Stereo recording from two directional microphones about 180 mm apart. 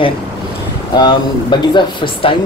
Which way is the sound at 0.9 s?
25° left (ahead or behind).